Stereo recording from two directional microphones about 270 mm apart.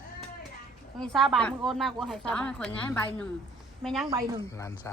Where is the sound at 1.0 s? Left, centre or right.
Centre.